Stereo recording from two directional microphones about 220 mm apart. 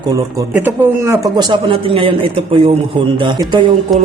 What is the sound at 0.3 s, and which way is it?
Speech, 10° right (ahead or behind).